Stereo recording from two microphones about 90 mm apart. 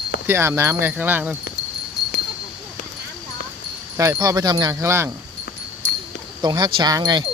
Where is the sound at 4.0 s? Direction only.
40° right (ahead or behind).